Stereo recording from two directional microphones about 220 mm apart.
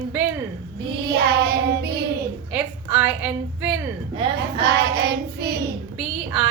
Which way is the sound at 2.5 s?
10° right (ahead or behind).